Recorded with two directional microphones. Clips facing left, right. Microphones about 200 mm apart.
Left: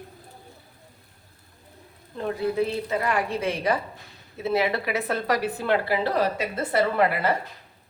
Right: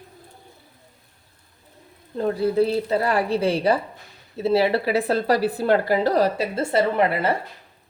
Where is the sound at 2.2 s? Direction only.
35° right (ahead or behind).